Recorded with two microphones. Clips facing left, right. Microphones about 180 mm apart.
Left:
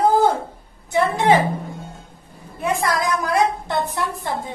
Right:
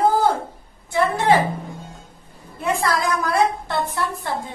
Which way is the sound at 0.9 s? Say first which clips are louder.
Left 2 dB; 20° left (ahead or behind).